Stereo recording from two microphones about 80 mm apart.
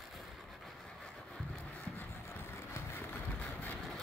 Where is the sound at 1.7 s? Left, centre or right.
Left.